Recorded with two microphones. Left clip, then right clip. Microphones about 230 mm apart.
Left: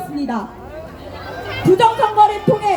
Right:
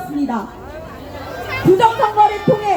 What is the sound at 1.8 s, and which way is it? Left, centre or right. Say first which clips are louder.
Music: left 2 dB; left.